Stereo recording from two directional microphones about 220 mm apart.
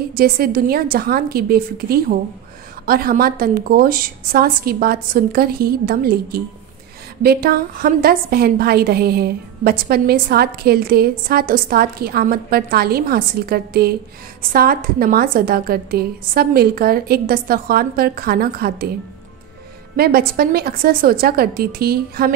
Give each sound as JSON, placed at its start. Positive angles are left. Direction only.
{"t": 0.1, "sound": "a woman's voice", "side_deg": -45}
{"t": 20.0, "sound": "a woman's voice", "side_deg": -45}